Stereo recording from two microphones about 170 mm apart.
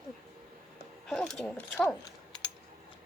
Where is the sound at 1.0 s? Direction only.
5° left (ahead or behind).